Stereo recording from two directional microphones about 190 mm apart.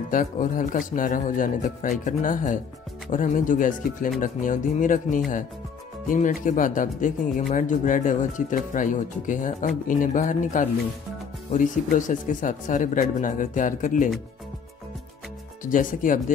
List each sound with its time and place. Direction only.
0.1 s speech: 45° left (ahead or behind)
15.6 s speech: 45° left (ahead or behind)